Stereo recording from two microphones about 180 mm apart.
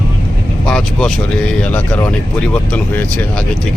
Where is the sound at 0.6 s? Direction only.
5° left (ahead or behind).